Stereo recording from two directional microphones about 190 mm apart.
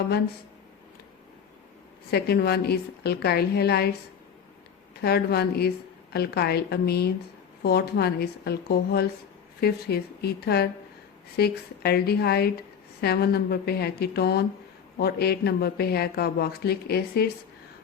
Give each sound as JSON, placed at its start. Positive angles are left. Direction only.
{"t": 2.0, "sound": "speech", "side_deg": 55}
{"t": 4.9, "sound": "speech", "side_deg": 55}